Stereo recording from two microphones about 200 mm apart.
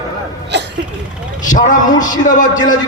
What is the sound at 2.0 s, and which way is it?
Speech, 40° left (ahead or behind).